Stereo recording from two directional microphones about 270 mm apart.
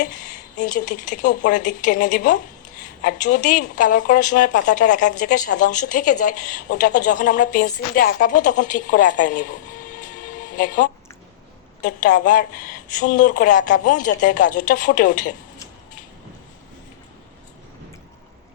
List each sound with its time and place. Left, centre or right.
0.5 s a woman's voice: left
11.8 s a woman's voice: left